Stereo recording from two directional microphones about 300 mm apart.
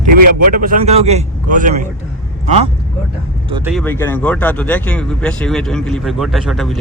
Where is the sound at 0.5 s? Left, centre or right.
Right.